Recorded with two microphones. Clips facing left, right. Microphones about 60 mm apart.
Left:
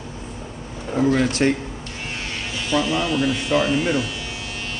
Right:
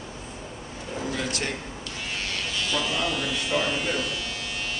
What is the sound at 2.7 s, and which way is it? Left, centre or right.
Speech, centre.